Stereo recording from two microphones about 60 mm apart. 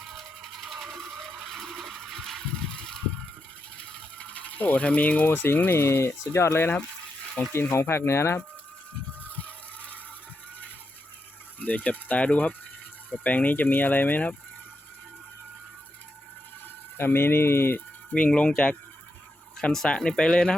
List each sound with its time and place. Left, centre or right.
0.0 s a sound: centre
3.9 s mechanisms: centre
5.3 s speech: left
9.2 s a sound: left
11.6 s speech: left
17.0 s speech: left
18.1 s speech: left